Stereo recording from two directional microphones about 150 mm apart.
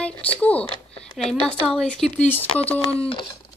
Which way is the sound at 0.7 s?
40° left (ahead or behind).